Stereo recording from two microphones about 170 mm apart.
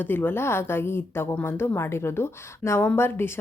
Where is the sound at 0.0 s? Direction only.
10° left (ahead or behind).